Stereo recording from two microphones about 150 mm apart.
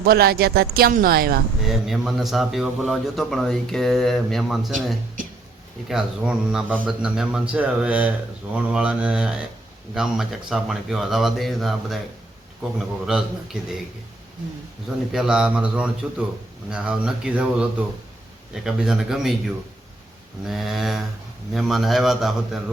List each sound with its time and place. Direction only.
0.0 s speech: 90° right
1.6 s a man's voice: centre (ahead or behind)
5.9 s a man's voice: 5° right (ahead or behind)
13.1 s a man's voice: 5° right (ahead or behind)
15.1 s a man's voice: 5° right (ahead or behind)